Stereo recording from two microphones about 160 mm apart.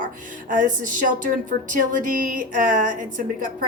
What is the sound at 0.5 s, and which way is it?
A woman's voice, 55° right (ahead or behind).